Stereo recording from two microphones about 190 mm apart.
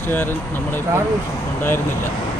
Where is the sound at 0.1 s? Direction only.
10° left (ahead or behind).